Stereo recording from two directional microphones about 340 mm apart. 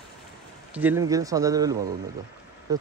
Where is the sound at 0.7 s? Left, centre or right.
Centre.